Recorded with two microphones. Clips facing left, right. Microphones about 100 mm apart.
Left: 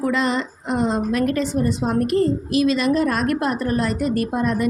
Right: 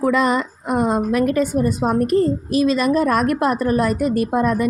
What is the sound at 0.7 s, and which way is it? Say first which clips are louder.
Speech: right 3 dB; 15° right (ahead or behind).